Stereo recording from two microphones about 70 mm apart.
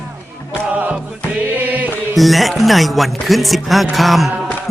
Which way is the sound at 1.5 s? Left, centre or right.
Right.